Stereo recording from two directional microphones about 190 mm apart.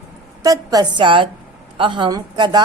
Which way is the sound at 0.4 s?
20° right (ahead or behind).